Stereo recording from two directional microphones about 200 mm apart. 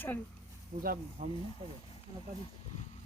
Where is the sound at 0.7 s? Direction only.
40° right (ahead or behind).